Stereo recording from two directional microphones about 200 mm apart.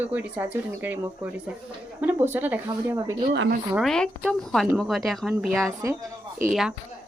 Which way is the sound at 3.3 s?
55° right (ahead or behind).